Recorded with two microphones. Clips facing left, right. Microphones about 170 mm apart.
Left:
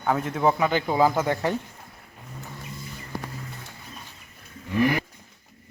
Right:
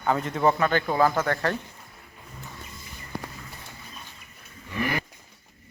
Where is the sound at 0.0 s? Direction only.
5° left (ahead or behind).